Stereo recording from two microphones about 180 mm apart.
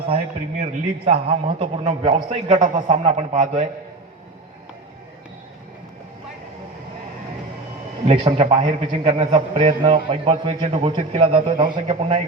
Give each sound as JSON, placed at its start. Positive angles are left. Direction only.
{"t": 0.6, "sound": "a man's voice", "side_deg": -35}
{"t": 8.0, "sound": "a man's voice", "side_deg": -30}